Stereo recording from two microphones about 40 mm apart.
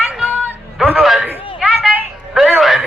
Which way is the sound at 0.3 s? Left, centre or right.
Right.